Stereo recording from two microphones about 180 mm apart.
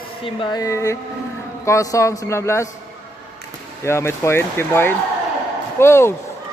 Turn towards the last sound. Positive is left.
turn(degrees=15)  # may be behind; listen again after turning